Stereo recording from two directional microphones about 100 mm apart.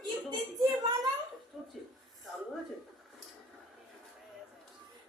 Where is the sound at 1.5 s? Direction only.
5° right (ahead or behind).